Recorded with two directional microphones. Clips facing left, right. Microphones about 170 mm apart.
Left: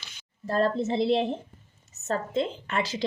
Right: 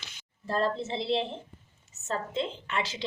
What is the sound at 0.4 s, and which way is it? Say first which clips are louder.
A woman's voice: left 4 dB; 45° left (ahead or behind).